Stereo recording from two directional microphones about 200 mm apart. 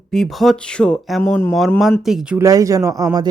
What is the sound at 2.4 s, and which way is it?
Speech, 15° right (ahead or behind).